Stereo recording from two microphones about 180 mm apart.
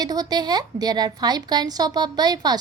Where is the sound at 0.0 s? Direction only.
20° right (ahead or behind).